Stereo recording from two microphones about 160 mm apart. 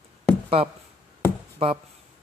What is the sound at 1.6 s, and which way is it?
Speech, 35° right (ahead or behind).